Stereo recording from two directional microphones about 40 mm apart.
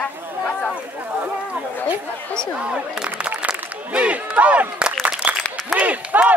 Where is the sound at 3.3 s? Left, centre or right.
Right.